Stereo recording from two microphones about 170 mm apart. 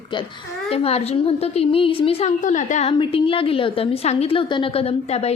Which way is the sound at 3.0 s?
30° left (ahead or behind).